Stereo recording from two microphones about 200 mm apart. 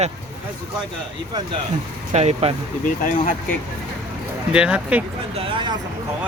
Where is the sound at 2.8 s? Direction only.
40° left (ahead or behind).